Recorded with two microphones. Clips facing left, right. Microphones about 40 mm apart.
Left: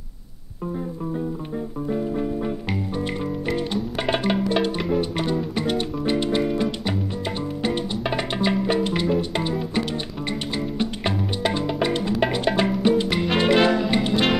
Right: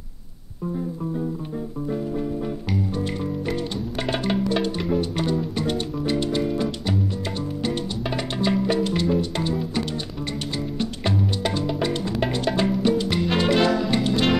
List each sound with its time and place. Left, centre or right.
1.9 s music: left
10.8 s music: centre